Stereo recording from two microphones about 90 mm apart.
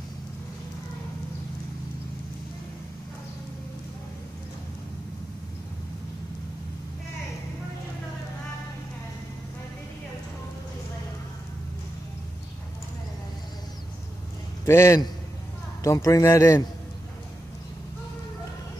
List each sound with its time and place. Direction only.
14.7 s a man's voice: 30° left (ahead or behind)